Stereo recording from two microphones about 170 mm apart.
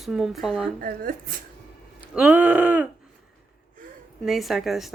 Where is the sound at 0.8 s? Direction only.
60° right (ahead or behind).